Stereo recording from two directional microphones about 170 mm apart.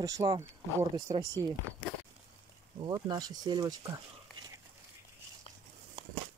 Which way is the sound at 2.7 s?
25° right (ahead or behind).